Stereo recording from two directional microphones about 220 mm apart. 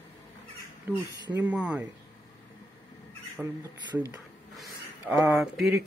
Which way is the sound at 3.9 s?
15° right (ahead or behind).